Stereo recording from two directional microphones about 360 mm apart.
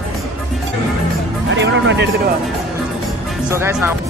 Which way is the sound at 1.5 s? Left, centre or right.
Right.